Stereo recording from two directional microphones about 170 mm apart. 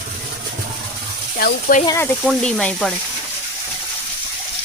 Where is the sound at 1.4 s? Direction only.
55° left (ahead or behind).